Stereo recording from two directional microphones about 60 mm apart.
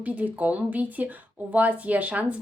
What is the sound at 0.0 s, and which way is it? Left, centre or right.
Speech, right.